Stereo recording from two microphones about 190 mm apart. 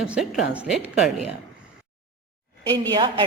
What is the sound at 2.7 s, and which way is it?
Speech, 25° right (ahead or behind).